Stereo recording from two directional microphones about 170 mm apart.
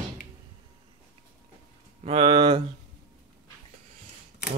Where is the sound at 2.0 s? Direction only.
30° right (ahead or behind).